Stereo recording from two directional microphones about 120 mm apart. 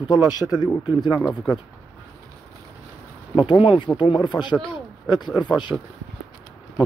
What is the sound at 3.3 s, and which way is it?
Speech, 45° left (ahead or behind).